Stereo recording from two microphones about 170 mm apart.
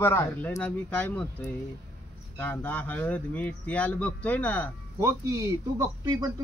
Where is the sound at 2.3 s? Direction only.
10° left (ahead or behind).